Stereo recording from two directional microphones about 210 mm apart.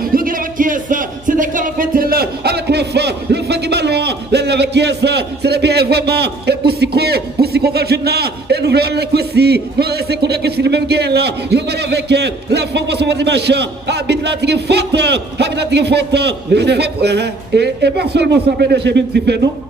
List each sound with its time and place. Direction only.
0.0 s music: 45° right (ahead or behind)
7.0 s a man's voice: 50° right (ahead or behind)